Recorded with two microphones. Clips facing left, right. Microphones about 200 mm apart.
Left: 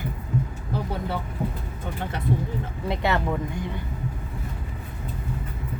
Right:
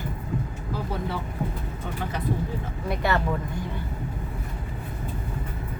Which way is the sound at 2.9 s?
25° left (ahead or behind).